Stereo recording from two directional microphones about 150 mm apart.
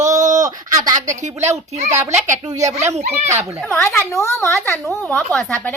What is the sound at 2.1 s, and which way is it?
Speech, 60° right (ahead or behind).